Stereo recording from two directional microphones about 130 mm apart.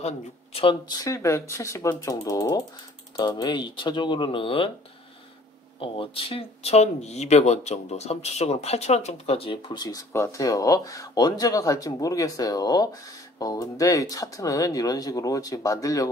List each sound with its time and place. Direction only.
0.0 s speech: 50° left (ahead or behind)
0.8 s speech: 25° left (ahead or behind); by 4.6 s 45° left (ahead or behind)
5.8 s speech: 45° left (ahead or behind); by 16.1 s 25° left (ahead or behind)